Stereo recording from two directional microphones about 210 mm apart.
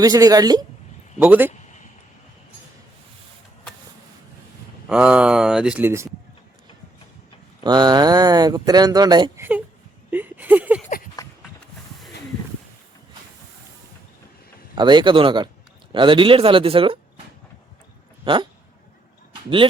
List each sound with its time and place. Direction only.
0.0 s a woman's voice: 15° right (ahead or behind)
4.9 s speech: 5° right (ahead or behind)
7.6 s speech: 20° right (ahead or behind)
9.4 s a woman's voice: 10° right (ahead or behind)
10.1 s a sound: 10° right (ahead or behind)
10.8 s a sound: 40° left (ahead or behind)
14.8 s speech: 20° right (ahead or behind)
18.3 s speech: 25° right (ahead or behind)